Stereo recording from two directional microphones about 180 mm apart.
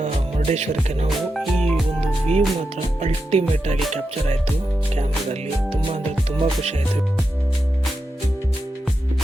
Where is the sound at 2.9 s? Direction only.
35° right (ahead or behind).